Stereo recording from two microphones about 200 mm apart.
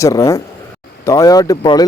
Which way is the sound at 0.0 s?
15° left (ahead or behind).